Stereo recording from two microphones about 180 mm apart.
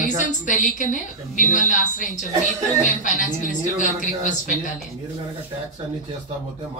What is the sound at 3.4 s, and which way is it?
A woman's voice, 45° left (ahead or behind).